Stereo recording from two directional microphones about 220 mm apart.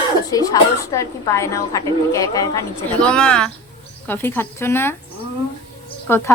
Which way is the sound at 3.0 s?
5° left (ahead or behind).